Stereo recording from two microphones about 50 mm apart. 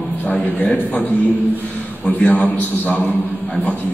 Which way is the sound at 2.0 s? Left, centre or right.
Left.